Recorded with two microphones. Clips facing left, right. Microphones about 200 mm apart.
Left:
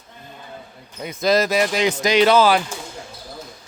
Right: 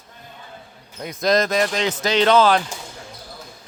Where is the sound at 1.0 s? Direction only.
5° left (ahead or behind).